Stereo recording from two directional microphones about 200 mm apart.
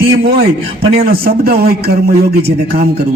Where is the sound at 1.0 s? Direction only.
50° right (ahead or behind).